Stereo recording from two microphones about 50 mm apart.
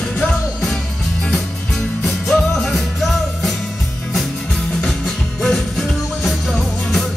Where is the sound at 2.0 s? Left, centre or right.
Centre.